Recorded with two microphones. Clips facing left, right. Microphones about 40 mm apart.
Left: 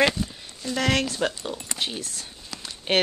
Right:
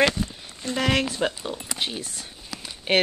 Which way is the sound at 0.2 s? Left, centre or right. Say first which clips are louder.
Right 1 dB; centre.